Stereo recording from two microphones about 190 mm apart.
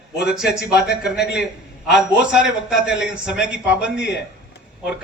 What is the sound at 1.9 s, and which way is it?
Speech, 65° left (ahead or behind).